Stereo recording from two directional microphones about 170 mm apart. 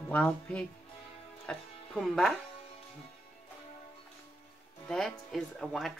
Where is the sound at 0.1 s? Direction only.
5° left (ahead or behind).